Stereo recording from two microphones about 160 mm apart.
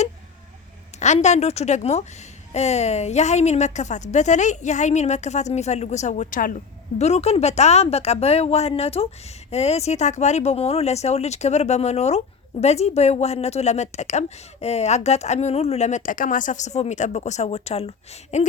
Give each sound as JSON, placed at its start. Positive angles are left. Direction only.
{"t": 0.9, "sound": "speech", "side_deg": 45}
{"t": 7.0, "sound": "speech", "side_deg": 40}